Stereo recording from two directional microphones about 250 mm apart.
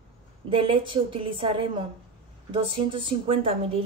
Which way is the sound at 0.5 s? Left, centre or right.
Right.